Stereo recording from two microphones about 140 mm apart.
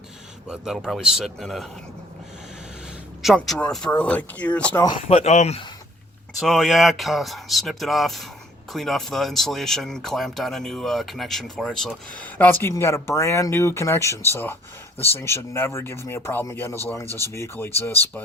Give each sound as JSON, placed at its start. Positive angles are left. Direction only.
{"t": 0.4, "sound": "speech", "side_deg": -5}
{"t": 3.2, "sound": "speech", "side_deg": 0}
{"t": 5.0, "sound": "speech", "side_deg": 50}
{"t": 6.4, "sound": "speech", "side_deg": 0}